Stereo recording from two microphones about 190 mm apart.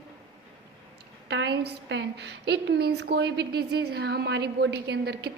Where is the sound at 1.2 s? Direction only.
70° right (ahead or behind).